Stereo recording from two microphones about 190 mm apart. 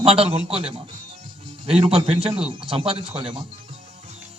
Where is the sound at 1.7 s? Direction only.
30° right (ahead or behind).